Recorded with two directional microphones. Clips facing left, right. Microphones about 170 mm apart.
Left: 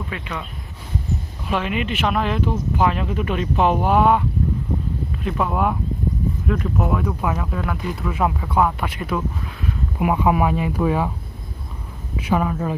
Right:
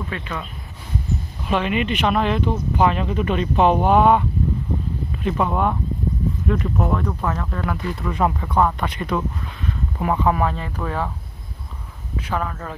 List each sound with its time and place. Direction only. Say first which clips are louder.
0.1 s speech: right 1 dB; 15° left (ahead or behind)
1.5 s speech: right 2 dB; 5° left (ahead or behind)
12.2 s speech: left 5 dB; 10° left (ahead or behind)